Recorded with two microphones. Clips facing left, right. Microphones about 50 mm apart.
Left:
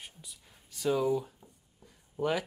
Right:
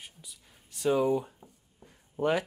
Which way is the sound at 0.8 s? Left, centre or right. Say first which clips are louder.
Right 3 dB; right.